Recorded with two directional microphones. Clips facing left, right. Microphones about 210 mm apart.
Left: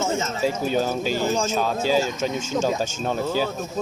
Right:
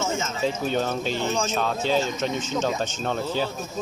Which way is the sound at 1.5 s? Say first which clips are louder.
Left 1 dB; 5° left (ahead or behind).